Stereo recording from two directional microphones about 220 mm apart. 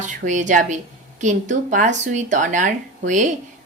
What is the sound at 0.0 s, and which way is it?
A woman's voice, 35° right (ahead or behind).